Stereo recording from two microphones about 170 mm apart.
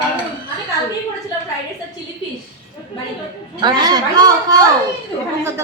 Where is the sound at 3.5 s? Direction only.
25° right (ahead or behind).